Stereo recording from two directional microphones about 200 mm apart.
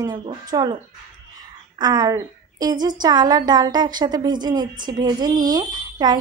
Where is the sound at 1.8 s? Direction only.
20° right (ahead or behind).